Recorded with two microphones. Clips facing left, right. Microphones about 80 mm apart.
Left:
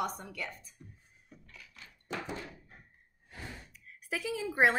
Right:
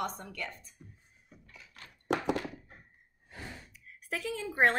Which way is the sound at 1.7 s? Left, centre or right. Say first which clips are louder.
Right 8 dB; right.